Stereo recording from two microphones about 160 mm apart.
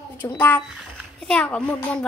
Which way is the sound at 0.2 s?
20° left (ahead or behind).